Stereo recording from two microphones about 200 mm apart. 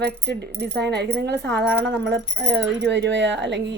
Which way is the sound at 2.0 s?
60° right (ahead or behind).